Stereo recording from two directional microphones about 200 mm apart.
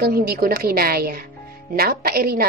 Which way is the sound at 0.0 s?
50° right (ahead or behind).